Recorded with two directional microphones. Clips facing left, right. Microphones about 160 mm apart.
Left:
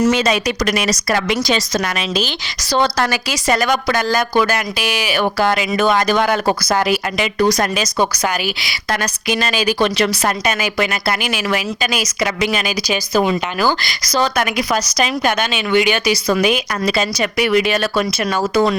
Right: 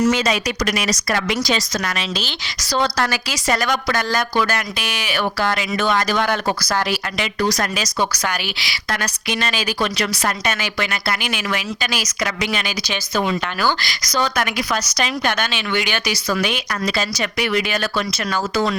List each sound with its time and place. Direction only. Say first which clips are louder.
0.1 s speech: left 3 dB; 25° left (ahead or behind)
2.0 s speech: left 5 dB; 15° left (ahead or behind)
9.5 s speech: left 7 dB; 15° left (ahead or behind)
10.4 s speech: left 5 dB; 10° left (ahead or behind)
14.1 s speech: left 4 dB; 25° left (ahead or behind)
14.7 s speech: left 4 dB; 10° left (ahead or behind)